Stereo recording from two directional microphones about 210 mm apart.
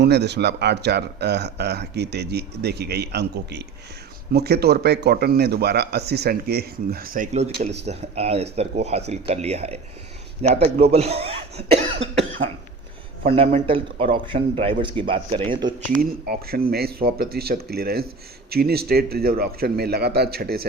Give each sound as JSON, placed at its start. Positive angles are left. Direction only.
{"t": 0.0, "sound": "speech", "side_deg": -55}
{"t": 13.3, "sound": "speech", "side_deg": -25}
{"t": 16.0, "sound": "speech", "side_deg": -45}